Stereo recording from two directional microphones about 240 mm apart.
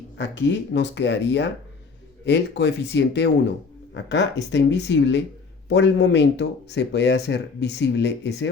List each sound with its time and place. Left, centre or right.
0.2 s speech: left